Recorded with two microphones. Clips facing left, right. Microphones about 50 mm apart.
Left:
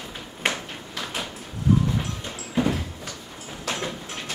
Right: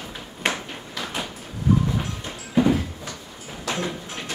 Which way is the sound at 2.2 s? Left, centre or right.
Centre.